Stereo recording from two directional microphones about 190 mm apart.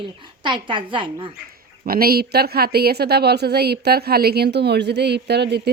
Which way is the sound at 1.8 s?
50° right (ahead or behind).